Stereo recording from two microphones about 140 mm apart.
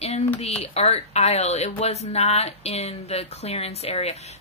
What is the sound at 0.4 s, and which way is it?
Speech, 50° left (ahead or behind).